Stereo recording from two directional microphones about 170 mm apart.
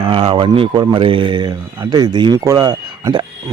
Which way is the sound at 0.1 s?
30° right (ahead or behind).